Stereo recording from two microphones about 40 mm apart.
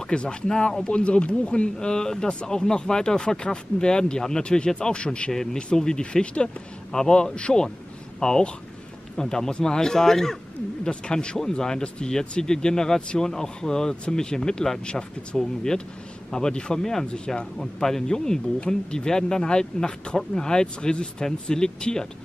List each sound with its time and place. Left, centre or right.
0.1 s speech: left
1.8 s speech: centre
5.3 s speech: centre
10.8 s speech: left
17.6 s speech: centre